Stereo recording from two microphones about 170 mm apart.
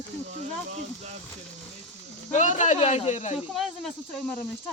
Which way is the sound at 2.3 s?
45° left (ahead or behind).